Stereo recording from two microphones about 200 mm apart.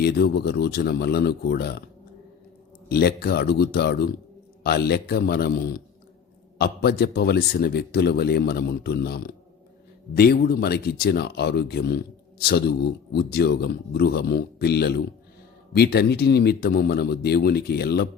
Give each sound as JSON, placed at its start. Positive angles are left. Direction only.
{"t": 0.0, "sound": "speech", "side_deg": 50}
{"t": 2.9, "sound": "speech", "side_deg": 50}